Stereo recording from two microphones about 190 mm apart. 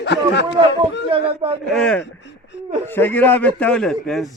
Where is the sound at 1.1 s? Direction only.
30° right (ahead or behind).